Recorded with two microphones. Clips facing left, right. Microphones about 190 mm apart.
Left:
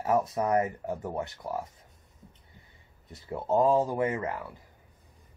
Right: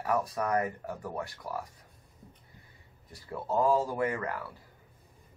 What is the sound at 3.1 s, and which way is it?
Speech, 20° left (ahead or behind).